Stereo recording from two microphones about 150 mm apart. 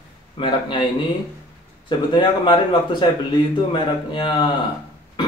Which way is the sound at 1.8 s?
35° left (ahead or behind).